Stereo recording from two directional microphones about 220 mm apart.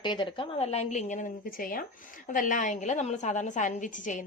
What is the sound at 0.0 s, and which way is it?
A woman's voice, 20° left (ahead or behind).